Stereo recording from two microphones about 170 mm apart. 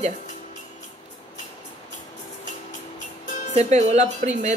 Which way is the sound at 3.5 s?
40° right (ahead or behind).